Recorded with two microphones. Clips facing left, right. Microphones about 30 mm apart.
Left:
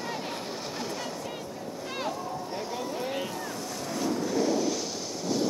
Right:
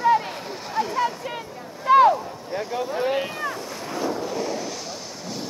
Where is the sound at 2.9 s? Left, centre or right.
Right.